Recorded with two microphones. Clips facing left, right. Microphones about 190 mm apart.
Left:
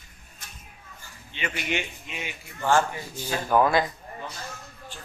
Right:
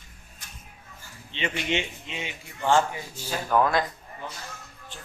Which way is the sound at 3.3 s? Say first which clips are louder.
Left 2 dB; 5° left (ahead or behind).